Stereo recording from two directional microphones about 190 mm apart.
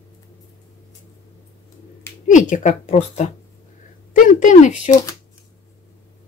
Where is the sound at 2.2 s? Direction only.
40° left (ahead or behind).